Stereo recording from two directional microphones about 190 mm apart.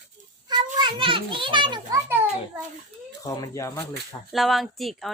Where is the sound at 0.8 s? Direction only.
25° right (ahead or behind).